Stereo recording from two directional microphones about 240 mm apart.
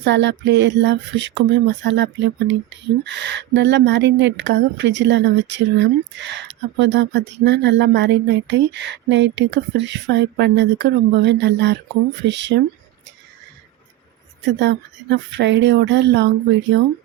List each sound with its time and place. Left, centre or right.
0.0 s speech: right
14.6 s speech: right